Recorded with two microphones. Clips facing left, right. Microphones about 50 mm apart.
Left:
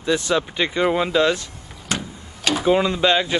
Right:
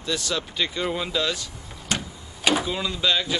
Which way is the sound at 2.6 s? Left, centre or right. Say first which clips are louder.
Left 9 dB; left.